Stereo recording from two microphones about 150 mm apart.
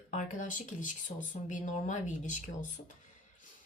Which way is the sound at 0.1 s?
55° left (ahead or behind).